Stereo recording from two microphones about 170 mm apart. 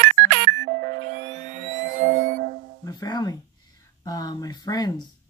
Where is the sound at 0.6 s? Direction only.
90° right.